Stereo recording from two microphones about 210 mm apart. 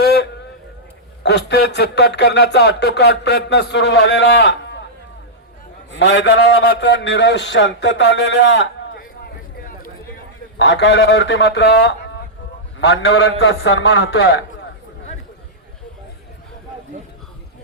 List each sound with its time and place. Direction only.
0.0 s a sound: 50° left (ahead or behind)
1.2 s speech: 55° left (ahead or behind)
5.9 s a man's voice: 60° left (ahead or behind)
10.6 s a man's voice: 60° left (ahead or behind)